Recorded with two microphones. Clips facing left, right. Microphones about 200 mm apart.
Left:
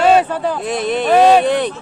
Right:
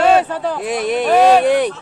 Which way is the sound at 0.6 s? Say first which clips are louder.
Even; 10° right (ahead or behind).